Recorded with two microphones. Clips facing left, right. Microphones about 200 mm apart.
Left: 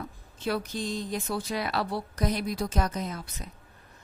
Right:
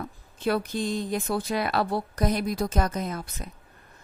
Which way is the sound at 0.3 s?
55° right (ahead or behind).